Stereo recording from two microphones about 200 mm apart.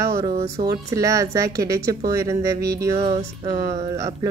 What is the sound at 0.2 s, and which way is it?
Speech, 20° right (ahead or behind).